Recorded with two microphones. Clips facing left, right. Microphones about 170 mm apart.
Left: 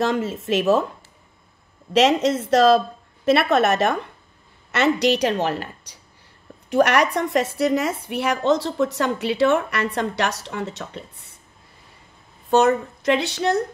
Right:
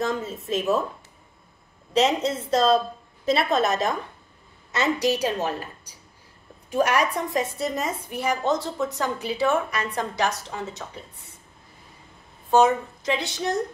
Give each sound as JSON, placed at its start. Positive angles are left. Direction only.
{"t": 0.0, "sound": "speech", "side_deg": 85}
{"t": 2.0, "sound": "a woman's voice", "side_deg": 85}
{"t": 12.4, "sound": "a woman's voice", "side_deg": 65}